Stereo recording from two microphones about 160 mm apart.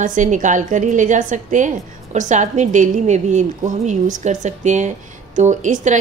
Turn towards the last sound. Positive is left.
turn(degrees=-50)  # may be behind; listen again after turning